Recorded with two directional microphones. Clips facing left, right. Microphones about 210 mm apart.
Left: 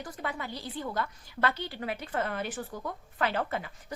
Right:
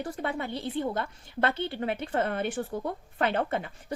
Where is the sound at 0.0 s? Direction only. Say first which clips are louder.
Right 5 dB; 30° right (ahead or behind).